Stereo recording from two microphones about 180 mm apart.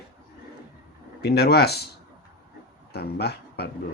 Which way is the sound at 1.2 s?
65° left (ahead or behind).